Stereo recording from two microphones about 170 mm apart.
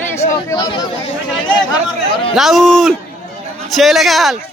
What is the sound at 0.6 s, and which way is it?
Speech, 30° left (ahead or behind).